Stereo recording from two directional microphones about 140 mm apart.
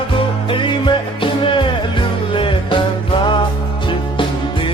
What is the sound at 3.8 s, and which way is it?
Music, 35° left (ahead or behind).